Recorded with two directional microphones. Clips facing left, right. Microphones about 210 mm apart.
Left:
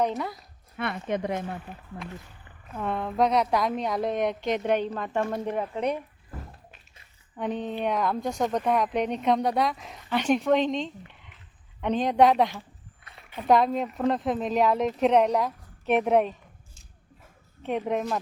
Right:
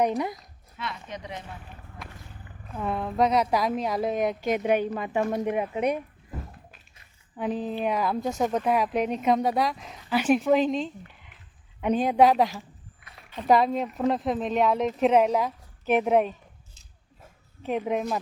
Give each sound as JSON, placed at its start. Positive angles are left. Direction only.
{"t": 0.0, "sound": "speech", "side_deg": -15}
{"t": 0.8, "sound": "speech", "side_deg": 55}
{"t": 2.7, "sound": "speech", "side_deg": -5}
{"t": 7.3, "sound": "speech", "side_deg": -5}
{"t": 17.6, "sound": "speech", "side_deg": 0}